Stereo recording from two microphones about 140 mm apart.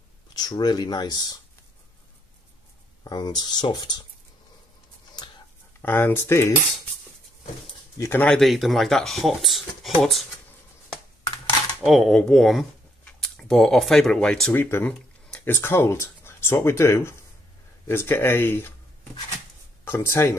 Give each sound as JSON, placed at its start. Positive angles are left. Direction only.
{"t": 0.3, "sound": "speech", "side_deg": 30}
{"t": 3.0, "sound": "speech", "side_deg": 30}
{"t": 5.8, "sound": "speech", "side_deg": 15}
{"t": 8.0, "sound": "speech", "side_deg": 15}
{"t": 11.8, "sound": "speech", "side_deg": 0}
{"t": 19.8, "sound": "speech", "side_deg": 20}